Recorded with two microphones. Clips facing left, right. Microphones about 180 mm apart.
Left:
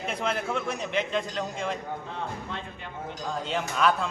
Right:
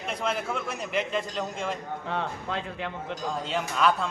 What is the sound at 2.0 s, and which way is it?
Speech, 85° right.